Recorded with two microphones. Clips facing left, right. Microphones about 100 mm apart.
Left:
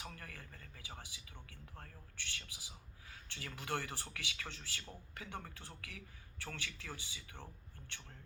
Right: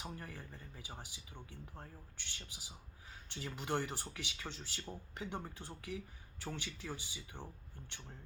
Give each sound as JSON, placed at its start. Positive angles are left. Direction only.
{"t": 0.0, "sound": "speech", "side_deg": -20}